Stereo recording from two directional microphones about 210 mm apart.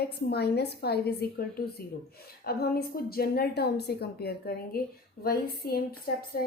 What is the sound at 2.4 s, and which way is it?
Speech, 45° left (ahead or behind).